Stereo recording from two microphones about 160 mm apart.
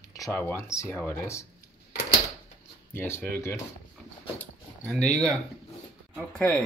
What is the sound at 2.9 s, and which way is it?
Speech, 15° left (ahead or behind).